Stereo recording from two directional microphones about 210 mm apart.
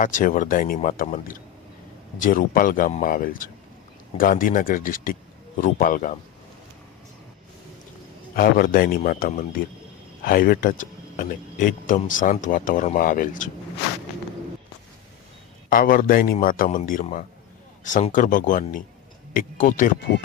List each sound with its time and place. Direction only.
0.0 s speech: 40° left (ahead or behind)
8.4 s a man's voice: 45° left (ahead or behind)
15.7 s speech: 40° left (ahead or behind)